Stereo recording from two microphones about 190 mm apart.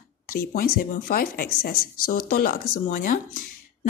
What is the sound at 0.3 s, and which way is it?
Speech, 50° left (ahead or behind).